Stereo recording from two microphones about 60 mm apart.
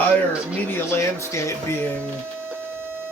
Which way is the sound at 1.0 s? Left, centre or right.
Left.